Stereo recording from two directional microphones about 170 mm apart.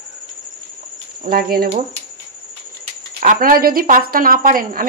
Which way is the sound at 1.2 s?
60° right (ahead or behind).